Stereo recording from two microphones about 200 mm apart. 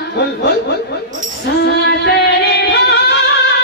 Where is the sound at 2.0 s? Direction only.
55° left (ahead or behind).